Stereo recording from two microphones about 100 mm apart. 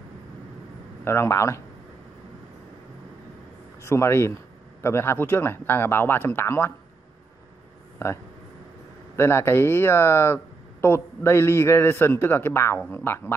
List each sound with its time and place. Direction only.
1.0 s speech: 25° left (ahead or behind)
3.8 s speech: 25° left (ahead or behind)
8.0 s speech: 25° left (ahead or behind)